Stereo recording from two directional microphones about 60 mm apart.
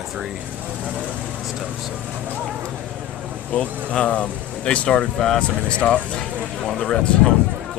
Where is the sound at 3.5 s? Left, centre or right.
Centre.